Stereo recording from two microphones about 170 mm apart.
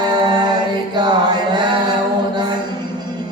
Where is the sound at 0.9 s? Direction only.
25° right (ahead or behind).